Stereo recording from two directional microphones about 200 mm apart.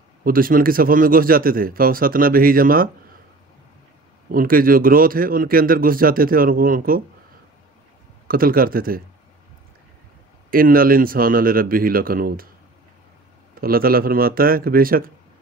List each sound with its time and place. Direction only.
0.2 s speech: 45° right (ahead or behind)
4.3 s speech: 45° right (ahead or behind)
8.3 s speech: 45° right (ahead or behind)
10.5 s speech: 45° right (ahead or behind)
13.6 s speech: 45° right (ahead or behind)